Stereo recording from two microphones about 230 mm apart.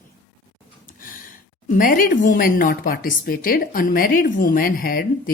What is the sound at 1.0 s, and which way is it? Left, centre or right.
A woman's voice, left.